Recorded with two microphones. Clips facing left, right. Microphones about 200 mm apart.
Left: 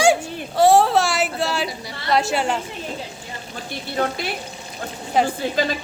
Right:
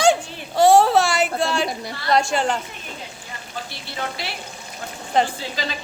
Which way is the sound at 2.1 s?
5° left (ahead or behind).